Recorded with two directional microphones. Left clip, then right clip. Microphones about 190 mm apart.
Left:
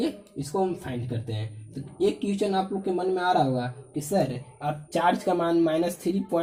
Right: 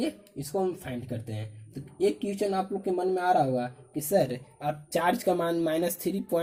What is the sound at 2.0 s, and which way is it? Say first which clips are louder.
Speech: left 2 dB; 50° right (ahead or behind).